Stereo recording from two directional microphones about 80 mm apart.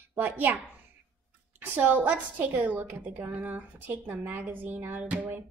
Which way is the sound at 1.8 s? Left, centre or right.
Centre.